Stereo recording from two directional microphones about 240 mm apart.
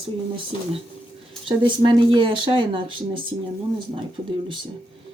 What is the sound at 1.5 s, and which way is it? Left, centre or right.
Speech, centre.